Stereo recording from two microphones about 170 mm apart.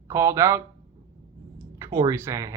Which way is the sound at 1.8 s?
20° right (ahead or behind).